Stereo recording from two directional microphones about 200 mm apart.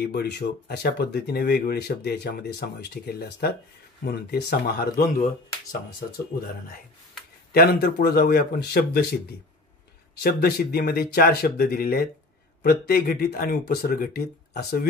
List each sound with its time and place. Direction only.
0.0 s speech: 55° left (ahead or behind)
7.5 s speech: 50° left (ahead or behind)
10.2 s speech: 50° left (ahead or behind)